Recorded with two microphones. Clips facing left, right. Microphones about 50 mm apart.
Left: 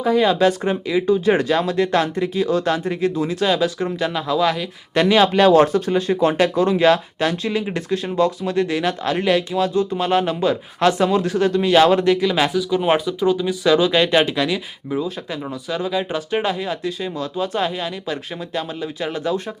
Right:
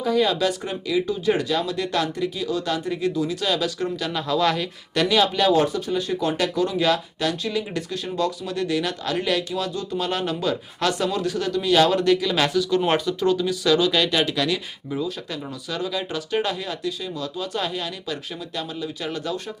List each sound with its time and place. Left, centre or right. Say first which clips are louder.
0.0 s speech: left 5 dB; left
4.1 s speech: left 1 dB; centre
4.9 s speech: left 5 dB; left
5.3 s speech: left 6 dB; left
12.0 s speech: left 3 dB; left